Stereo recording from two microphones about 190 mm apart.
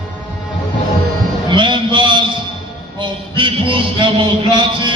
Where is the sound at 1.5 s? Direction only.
25° right (ahead or behind).